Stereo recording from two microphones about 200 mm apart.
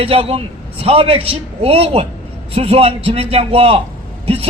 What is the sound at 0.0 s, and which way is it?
A man's voice, 30° right (ahead or behind).